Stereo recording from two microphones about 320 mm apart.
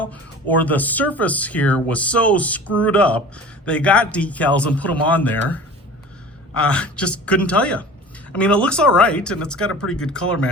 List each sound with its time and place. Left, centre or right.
0.0 s speech: centre
9.6 s speech: left
10.0 s speech: centre